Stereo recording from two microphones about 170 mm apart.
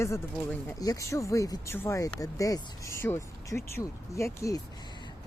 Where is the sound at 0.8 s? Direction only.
20° left (ahead or behind).